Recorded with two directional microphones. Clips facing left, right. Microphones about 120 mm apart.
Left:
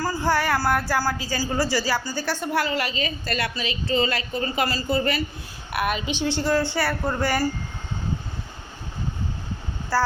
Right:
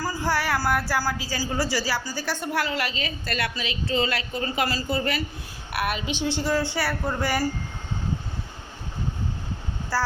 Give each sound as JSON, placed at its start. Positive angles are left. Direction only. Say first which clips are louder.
{"t": 0.0, "sound": "a woman's voice", "louder": "left 3 dB", "side_deg": -10}
{"t": 9.9, "sound": "a woman's voice", "louder": "left 4 dB", "side_deg": -10}